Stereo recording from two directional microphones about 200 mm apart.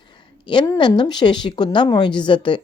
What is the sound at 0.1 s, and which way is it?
A woman's voice, 25° left (ahead or behind).